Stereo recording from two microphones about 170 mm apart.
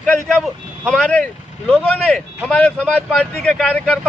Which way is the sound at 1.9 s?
Centre (ahead or behind).